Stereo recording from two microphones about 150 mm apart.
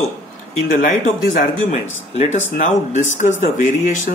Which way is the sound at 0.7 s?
65° left (ahead or behind).